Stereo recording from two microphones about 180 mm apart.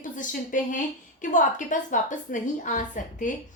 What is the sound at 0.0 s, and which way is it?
A woman's voice, 45° left (ahead or behind).